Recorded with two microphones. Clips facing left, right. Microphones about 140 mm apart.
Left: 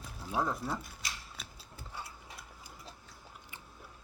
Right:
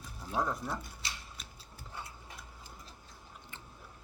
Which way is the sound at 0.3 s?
10° left (ahead or behind).